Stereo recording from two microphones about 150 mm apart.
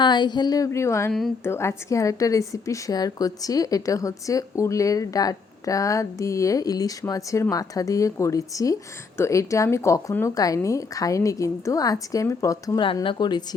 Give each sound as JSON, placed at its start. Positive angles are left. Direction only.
{"t": 0.0, "sound": "a woman's voice", "side_deg": 30}
{"t": 12.8, "sound": "a woman's voice", "side_deg": 35}